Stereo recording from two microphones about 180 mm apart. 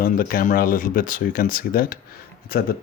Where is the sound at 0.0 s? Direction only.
55° left (ahead or behind).